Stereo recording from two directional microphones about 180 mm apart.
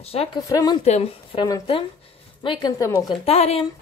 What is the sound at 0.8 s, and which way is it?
Speech, 35° left (ahead or behind).